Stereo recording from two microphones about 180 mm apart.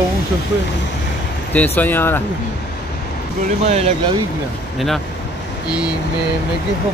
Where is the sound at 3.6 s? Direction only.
35° right (ahead or behind).